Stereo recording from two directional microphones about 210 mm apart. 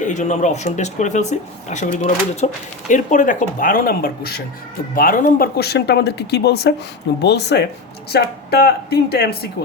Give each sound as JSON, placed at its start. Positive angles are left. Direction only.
{"t": 0.0, "sound": "speech", "side_deg": 35}